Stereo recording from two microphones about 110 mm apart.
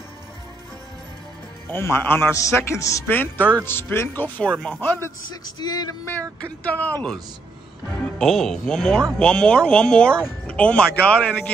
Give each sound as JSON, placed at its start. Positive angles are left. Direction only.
{"t": 1.7, "sound": "a man's voice", "side_deg": 20}
{"t": 5.3, "sound": "speech", "side_deg": 40}
{"t": 6.6, "sound": "speech", "side_deg": 15}